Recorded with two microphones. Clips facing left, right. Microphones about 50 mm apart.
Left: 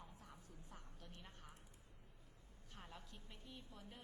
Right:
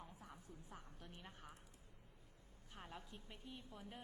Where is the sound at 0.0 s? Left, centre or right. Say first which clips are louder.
Right 3 dB; centre.